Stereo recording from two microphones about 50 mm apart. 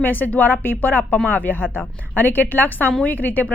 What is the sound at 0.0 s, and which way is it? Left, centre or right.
A woman's voice, left.